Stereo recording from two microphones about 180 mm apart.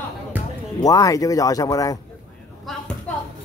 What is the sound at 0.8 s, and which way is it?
Speech, 20° left (ahead or behind).